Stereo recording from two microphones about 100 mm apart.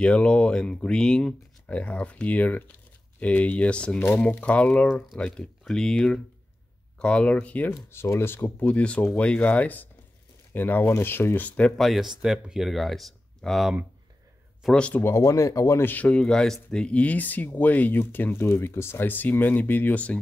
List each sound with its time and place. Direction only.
0.0 s speech: 10° left (ahead or behind)
15.0 s speech: 30° left (ahead or behind); by 20.2 s 15° left (ahead or behind)